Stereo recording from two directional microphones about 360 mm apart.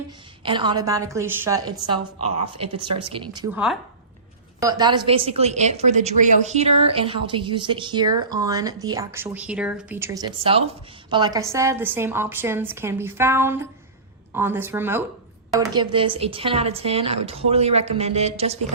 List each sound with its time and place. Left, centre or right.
0.4 s a woman's voice: centre